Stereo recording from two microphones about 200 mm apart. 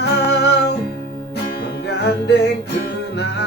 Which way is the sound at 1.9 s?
55° left (ahead or behind).